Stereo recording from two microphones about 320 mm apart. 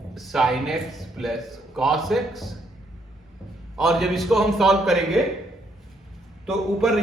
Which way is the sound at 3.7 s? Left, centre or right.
Centre.